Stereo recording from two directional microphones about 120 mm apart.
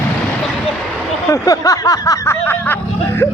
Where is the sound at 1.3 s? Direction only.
30° left (ahead or behind).